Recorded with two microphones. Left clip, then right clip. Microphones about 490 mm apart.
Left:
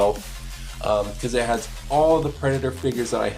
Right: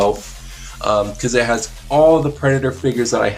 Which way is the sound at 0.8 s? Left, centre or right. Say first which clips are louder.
Right 5 dB; left.